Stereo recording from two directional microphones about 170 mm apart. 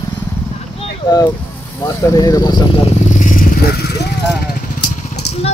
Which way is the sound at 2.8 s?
50° left (ahead or behind).